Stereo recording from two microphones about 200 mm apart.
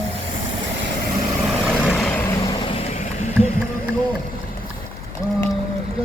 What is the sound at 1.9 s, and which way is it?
Vehicle, 10° left (ahead or behind).